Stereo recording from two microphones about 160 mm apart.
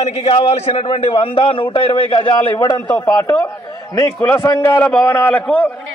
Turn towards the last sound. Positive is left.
turn(degrees=10)  # may be behind; listen again after turning